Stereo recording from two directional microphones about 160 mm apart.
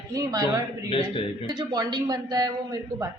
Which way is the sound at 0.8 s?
35° left (ahead or behind).